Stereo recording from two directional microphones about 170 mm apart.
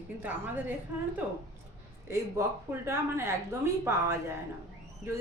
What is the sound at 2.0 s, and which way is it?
Speech, 15° right (ahead or behind).